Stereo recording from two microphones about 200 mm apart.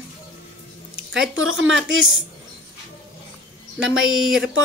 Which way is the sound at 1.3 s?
90° right.